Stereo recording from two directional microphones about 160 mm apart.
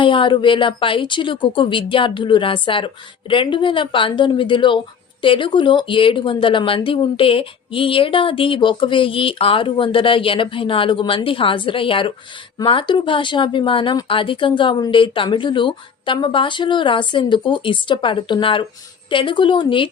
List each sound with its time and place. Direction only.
0.0 s speech: 30° left (ahead or behind)